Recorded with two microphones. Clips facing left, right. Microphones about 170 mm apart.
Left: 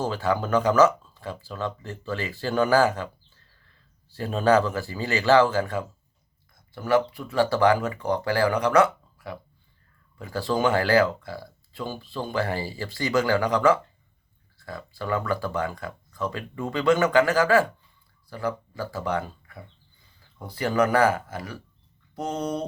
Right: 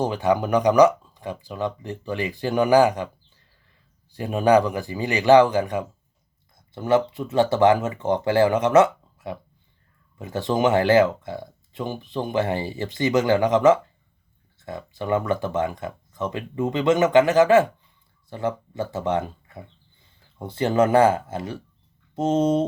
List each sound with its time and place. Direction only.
0.0 s speech: 15° right (ahead or behind)